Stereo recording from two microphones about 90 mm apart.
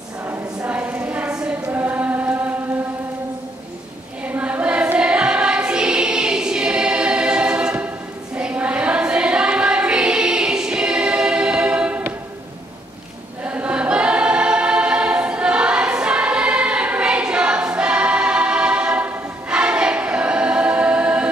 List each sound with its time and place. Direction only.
0.6 s choir: 15° right (ahead or behind)
4.2 s choir: 15° right (ahead or behind)
13.4 s choir: 15° right (ahead or behind)